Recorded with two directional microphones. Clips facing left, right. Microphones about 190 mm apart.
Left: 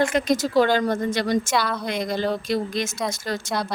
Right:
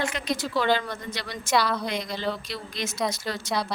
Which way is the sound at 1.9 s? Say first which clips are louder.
Left 5 dB; 50° left (ahead or behind).